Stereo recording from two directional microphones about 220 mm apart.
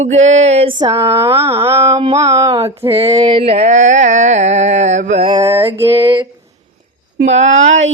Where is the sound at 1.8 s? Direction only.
25° right (ahead or behind).